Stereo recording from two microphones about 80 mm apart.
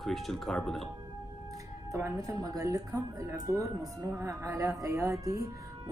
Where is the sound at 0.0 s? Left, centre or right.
Centre.